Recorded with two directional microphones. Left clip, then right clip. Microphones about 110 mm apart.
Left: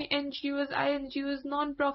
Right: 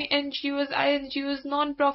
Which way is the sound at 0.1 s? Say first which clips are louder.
Right 4 dB; 30° right (ahead or behind).